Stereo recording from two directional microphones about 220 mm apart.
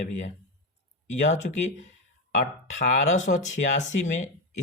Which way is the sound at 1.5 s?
45° left (ahead or behind).